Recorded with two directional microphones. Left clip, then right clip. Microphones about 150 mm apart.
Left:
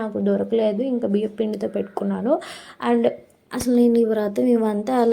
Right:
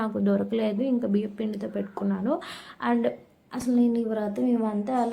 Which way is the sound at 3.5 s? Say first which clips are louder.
Left 7 dB; 35° left (ahead or behind).